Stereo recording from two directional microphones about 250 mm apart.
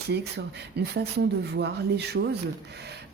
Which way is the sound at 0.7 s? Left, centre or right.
Right.